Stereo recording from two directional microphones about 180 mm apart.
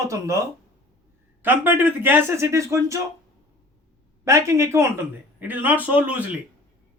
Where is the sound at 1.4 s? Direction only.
10° right (ahead or behind).